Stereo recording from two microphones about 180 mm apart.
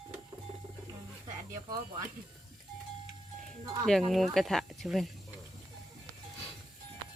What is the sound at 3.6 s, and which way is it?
Speech, 20° right (ahead or behind).